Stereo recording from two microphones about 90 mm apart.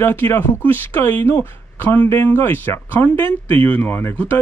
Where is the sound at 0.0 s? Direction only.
25° left (ahead or behind).